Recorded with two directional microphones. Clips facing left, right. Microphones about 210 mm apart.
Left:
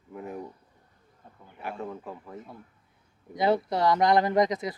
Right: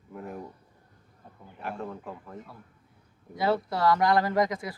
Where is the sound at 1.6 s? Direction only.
Centre (ahead or behind).